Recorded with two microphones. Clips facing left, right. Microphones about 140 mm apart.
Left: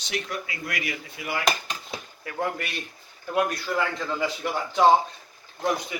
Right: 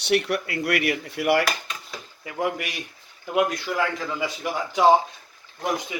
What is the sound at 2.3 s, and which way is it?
A man's voice, 10° right (ahead or behind).